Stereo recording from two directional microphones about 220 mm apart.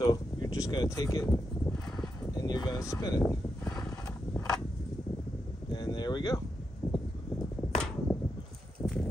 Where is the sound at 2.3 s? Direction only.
20° left (ahead or behind).